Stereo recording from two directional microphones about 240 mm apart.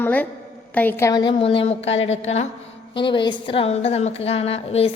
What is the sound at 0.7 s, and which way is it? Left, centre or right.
A woman's voice, centre.